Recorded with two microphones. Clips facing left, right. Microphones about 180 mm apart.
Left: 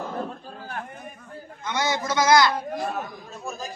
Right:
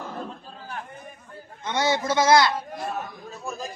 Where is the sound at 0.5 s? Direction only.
55° left (ahead or behind).